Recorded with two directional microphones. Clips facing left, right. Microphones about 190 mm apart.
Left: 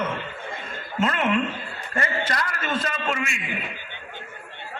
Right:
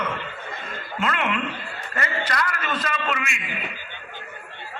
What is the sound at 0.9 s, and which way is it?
A man's voice, 40° left (ahead or behind).